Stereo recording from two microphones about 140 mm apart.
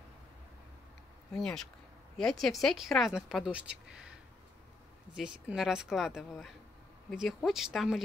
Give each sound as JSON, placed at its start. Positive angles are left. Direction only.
{"t": 1.3, "sound": "a woman's voice", "side_deg": 5}
{"t": 5.1, "sound": "a woman's voice", "side_deg": -5}